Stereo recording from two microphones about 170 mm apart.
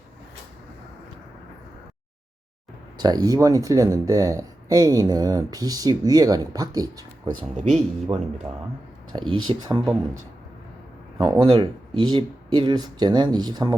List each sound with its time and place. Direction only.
3.0 s speech: 25° right (ahead or behind)
11.2 s speech: 25° right (ahead or behind)